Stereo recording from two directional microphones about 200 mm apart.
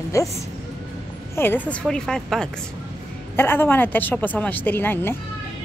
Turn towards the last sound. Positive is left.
turn(degrees=10)  # may be behind; listen again after turning